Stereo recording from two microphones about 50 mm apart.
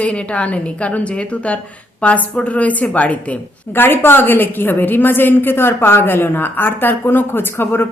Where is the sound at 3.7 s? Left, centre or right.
Left.